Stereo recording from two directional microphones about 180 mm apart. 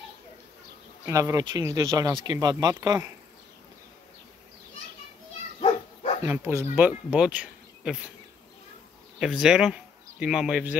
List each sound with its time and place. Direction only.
1.0 s speech: 20° right (ahead or behind)
6.2 s speech: 15° right (ahead or behind)
9.2 s speech: 5° right (ahead or behind)